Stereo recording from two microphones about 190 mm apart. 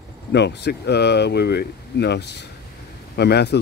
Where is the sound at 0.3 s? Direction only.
65° left (ahead or behind).